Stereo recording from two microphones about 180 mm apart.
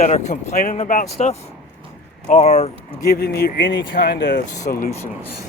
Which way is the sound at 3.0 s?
60° left (ahead or behind).